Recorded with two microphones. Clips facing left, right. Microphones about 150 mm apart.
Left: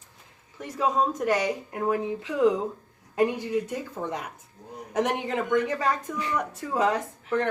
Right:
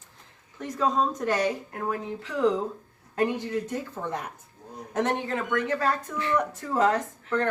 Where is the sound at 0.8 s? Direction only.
10° left (ahead or behind).